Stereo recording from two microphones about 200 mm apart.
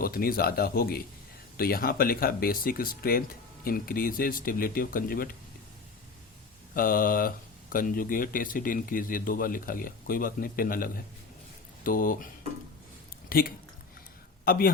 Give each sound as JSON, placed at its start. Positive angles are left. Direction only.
{"t": 0.0, "sound": "speech", "side_deg": 45}
{"t": 6.7, "sound": "speech", "side_deg": 45}
{"t": 13.2, "sound": "a sound", "side_deg": 45}
{"t": 14.4, "sound": "speech", "side_deg": 45}